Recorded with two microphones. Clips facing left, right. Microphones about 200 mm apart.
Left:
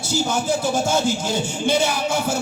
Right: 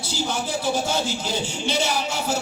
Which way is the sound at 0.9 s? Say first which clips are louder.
Left 5 dB; 50° left (ahead or behind).